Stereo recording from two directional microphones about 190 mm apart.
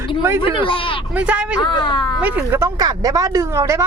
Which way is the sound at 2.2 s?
10° right (ahead or behind).